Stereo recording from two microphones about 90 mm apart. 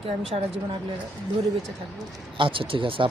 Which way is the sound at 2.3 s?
70° right (ahead or behind).